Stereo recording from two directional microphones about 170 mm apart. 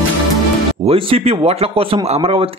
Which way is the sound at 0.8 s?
35° right (ahead or behind).